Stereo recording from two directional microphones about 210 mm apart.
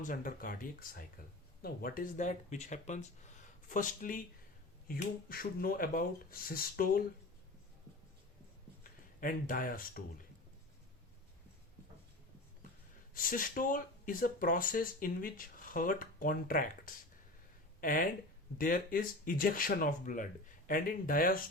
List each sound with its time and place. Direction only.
0.0 s speech: 40° left (ahead or behind)
8.8 s speech: 40° left (ahead or behind)
13.1 s speech: 40° left (ahead or behind)